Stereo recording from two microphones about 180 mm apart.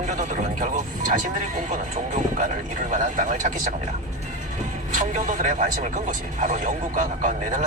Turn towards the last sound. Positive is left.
turn(degrees=-45)  # may be behind; listen again after turning